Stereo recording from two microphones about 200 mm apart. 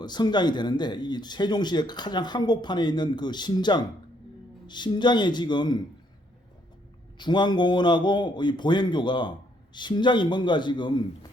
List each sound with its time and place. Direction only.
0.0 s speech: 20° left (ahead or behind)
7.2 s speech: 20° left (ahead or behind)